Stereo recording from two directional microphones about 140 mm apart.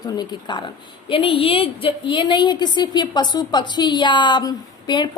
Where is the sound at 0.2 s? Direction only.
30° left (ahead or behind).